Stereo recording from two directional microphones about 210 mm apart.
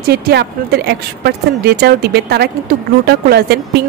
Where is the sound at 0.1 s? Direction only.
50° right (ahead or behind).